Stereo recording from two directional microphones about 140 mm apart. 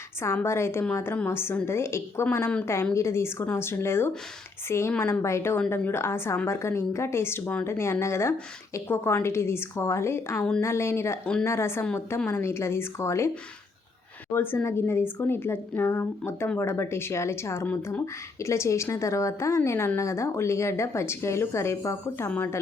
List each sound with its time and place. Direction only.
0.4 s a woman's voice: 20° left (ahead or behind)
14.3 s a woman's voice: 15° left (ahead or behind)